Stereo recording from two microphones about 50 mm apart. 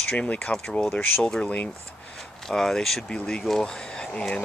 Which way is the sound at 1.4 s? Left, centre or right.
Left.